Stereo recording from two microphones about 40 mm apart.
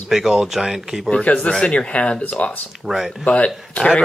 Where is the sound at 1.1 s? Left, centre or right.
Left.